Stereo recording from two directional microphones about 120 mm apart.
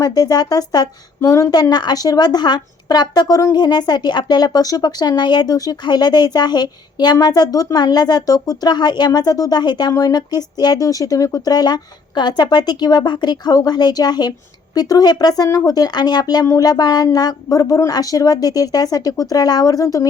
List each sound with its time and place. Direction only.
0.0 s speech: 35° left (ahead or behind)